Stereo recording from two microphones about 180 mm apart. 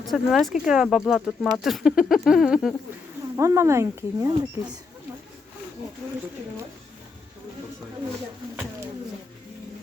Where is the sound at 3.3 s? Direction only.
15° right (ahead or behind).